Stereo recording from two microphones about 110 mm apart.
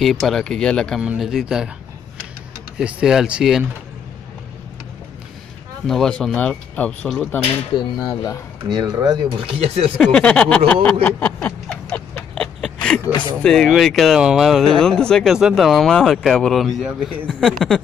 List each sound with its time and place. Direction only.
0.0 s speech: centre (ahead or behind)
2.8 s speech: 10° right (ahead or behind)
5.9 s speech: 5° left (ahead or behind)
7.7 s speech: 45° left (ahead or behind)
8.6 s speech: 40° right (ahead or behind)
9.4 s speech: 50° right (ahead or behind)
9.9 s speech: 5° left (ahead or behind)
10.7 s a sound: 15° left (ahead or behind)
13.4 s speech: 5° left (ahead or behind)